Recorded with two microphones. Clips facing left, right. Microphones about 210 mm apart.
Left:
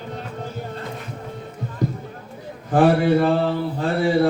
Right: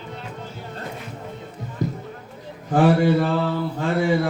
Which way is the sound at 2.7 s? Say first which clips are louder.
Left 1 dB; 55° left (ahead or behind).